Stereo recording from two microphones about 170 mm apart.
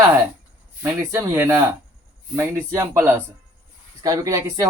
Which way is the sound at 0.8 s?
15° right (ahead or behind).